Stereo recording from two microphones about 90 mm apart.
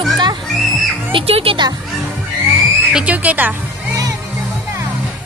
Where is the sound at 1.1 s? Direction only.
90° right.